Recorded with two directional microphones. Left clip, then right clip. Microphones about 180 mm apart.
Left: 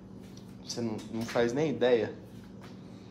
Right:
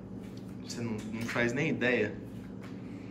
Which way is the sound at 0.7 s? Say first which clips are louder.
Left 3 dB; 30° left (ahead or behind).